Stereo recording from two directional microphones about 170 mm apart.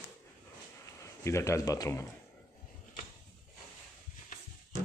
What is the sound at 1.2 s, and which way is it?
Speech, 15° left (ahead or behind).